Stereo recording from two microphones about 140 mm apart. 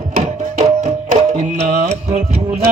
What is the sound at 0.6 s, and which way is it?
Music, 55° right (ahead or behind).